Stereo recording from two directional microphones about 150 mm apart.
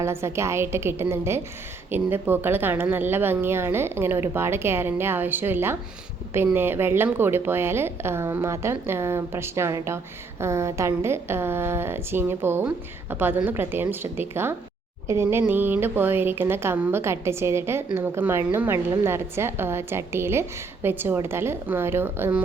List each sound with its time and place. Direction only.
0.0 s a woman's voice: 20° right (ahead or behind)